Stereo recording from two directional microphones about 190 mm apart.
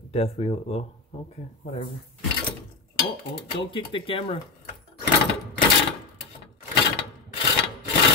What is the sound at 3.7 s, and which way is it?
Speech, 25° left (ahead or behind).